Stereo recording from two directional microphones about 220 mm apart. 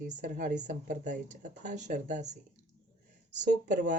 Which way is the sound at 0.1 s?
35° right (ahead or behind).